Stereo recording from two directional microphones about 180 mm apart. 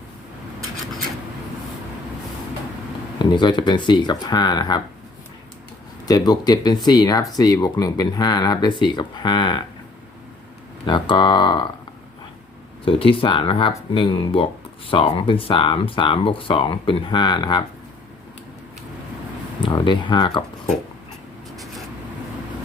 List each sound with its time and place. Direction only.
3.2 s speech: 25° left (ahead or behind)
6.1 s speech: 20° left (ahead or behind)
10.8 s speech: 25° left (ahead or behind)
12.8 s speech: 30° left (ahead or behind)
19.6 s speech: 25° left (ahead or behind)